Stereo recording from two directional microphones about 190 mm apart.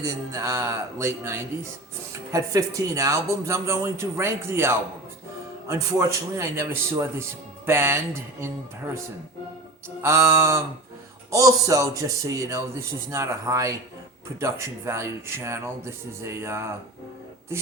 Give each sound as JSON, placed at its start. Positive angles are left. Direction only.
{"t": 0.0, "sound": "a man's voice", "side_deg": -15}
{"t": 10.0, "sound": "a man's voice", "side_deg": -15}